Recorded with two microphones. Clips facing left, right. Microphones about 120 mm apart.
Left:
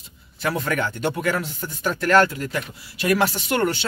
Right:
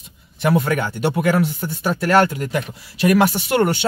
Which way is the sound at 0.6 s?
35° right (ahead or behind).